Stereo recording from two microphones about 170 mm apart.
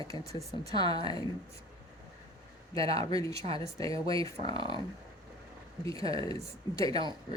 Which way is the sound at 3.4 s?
40° right (ahead or behind).